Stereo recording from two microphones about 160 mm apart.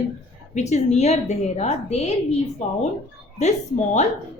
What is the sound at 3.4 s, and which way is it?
Speech, 45° left (ahead or behind).